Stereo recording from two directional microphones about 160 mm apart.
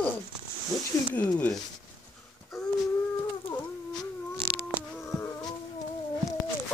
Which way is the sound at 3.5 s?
20° left (ahead or behind).